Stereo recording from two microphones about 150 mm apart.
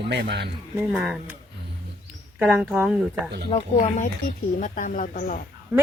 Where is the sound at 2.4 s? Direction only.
10° right (ahead or behind).